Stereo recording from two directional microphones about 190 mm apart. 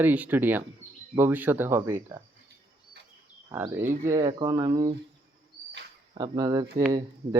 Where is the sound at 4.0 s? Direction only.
20° right (ahead or behind).